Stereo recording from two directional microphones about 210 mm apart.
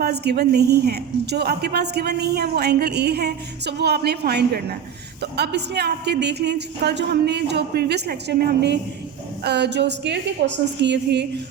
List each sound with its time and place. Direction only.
0.0 s a woman's voice: 50° right (ahead or behind)